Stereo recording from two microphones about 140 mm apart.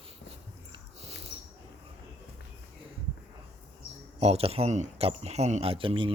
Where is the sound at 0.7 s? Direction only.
50° right (ahead or behind).